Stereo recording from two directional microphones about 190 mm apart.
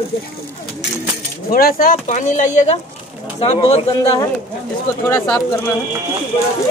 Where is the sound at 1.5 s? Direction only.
50° left (ahead or behind).